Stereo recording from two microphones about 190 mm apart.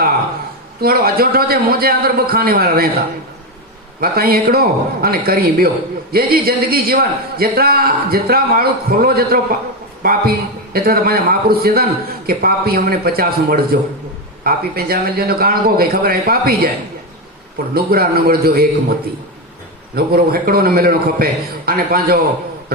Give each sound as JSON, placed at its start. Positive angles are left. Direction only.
{"t": 0.8, "sound": "a man's voice", "side_deg": -55}
{"t": 4.0, "sound": "a man's voice", "side_deg": -55}
{"t": 17.7, "sound": "a man's voice", "side_deg": -55}
{"t": 20.0, "sound": "a man's voice", "side_deg": -50}